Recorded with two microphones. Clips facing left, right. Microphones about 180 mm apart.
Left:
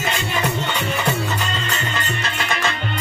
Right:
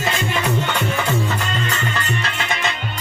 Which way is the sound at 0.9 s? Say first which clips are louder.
Right 1 dB; 70° left (ahead or behind).